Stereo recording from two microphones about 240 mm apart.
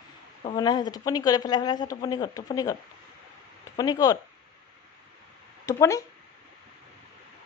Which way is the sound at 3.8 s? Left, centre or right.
Centre.